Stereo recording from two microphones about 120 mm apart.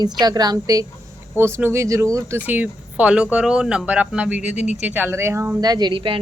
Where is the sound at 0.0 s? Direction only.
35° right (ahead or behind).